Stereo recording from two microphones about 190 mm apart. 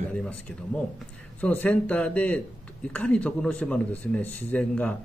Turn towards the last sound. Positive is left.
turn(degrees=5)  # may be behind; listen again after turning